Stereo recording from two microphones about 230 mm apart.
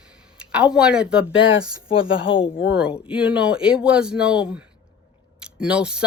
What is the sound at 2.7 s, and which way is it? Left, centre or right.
Speech, centre.